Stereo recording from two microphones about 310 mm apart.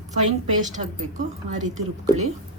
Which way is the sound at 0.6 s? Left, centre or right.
Right.